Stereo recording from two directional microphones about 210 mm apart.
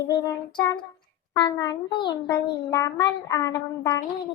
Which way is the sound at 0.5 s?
20° left (ahead or behind).